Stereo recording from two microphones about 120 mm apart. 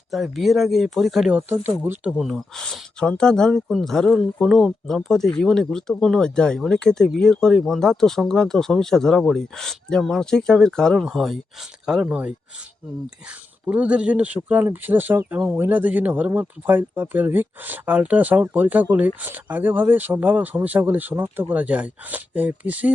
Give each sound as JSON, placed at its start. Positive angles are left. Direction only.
{"t": 0.1, "sound": "speech", "side_deg": 0}
{"t": 1.4, "sound": "speech", "side_deg": -15}
{"t": 2.0, "sound": "speech", "side_deg": -5}
{"t": 13.7, "sound": "speech", "side_deg": -10}